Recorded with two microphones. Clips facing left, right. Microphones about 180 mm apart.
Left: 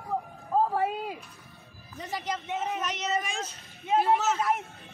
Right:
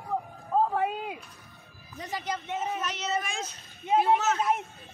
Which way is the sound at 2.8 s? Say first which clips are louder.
Left 1 dB; 15° left (ahead or behind).